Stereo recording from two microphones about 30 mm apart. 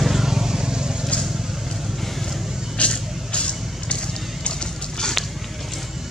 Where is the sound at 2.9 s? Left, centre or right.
Left.